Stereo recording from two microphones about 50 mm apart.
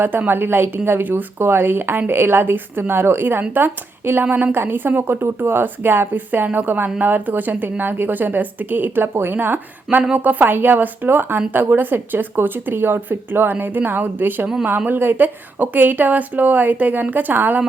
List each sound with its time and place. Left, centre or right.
0.3 s speech: right